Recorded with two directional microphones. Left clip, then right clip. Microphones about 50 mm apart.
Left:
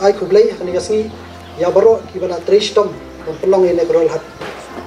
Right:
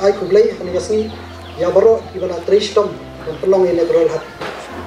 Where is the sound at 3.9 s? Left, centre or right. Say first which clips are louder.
Even; right.